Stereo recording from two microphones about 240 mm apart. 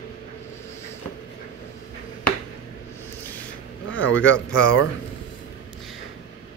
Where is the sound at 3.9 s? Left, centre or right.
Left.